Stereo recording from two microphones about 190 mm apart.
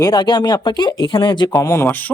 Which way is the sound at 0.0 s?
20° left (ahead or behind).